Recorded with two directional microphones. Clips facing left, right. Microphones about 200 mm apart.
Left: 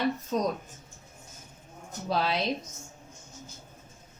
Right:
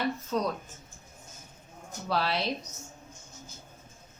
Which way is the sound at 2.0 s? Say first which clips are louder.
Left 1 dB; 20° left (ahead or behind).